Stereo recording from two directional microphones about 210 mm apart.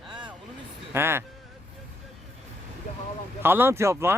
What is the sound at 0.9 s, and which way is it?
Speech, 10° right (ahead or behind).